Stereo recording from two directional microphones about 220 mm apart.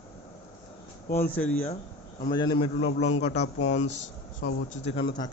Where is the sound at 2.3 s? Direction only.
20° left (ahead or behind).